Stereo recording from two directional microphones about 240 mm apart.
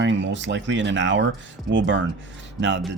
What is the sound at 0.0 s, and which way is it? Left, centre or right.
Speech, right.